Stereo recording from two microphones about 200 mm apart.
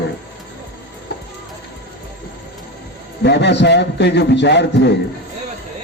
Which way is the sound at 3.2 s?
60° left (ahead or behind).